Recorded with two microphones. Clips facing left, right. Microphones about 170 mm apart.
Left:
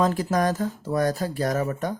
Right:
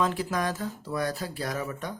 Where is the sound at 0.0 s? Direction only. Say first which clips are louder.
Left 5 dB; 40° left (ahead or behind).